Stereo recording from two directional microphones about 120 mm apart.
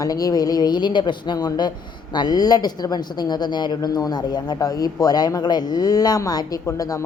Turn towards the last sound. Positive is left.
turn(degrees=30)  # may be behind; listen again after turning